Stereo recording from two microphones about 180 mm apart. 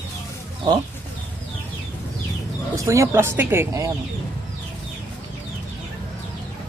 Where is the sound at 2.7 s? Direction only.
15° right (ahead or behind).